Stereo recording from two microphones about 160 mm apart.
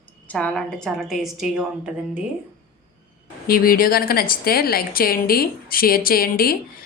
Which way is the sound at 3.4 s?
65° left (ahead or behind).